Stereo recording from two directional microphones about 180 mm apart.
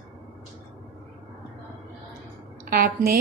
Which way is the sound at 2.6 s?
55° right (ahead or behind).